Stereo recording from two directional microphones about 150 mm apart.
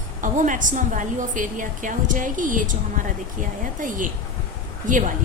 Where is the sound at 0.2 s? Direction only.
60° right (ahead or behind).